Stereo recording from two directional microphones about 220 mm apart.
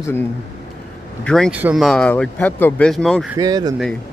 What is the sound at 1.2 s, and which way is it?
Speech, 5° left (ahead or behind).